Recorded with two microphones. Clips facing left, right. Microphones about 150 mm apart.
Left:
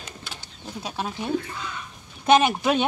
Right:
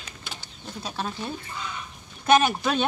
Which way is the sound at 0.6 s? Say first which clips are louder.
Left 1 dB; 15° left (ahead or behind).